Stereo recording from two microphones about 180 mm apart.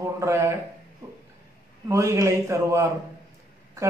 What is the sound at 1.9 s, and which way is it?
A man's voice, 15° right (ahead or behind).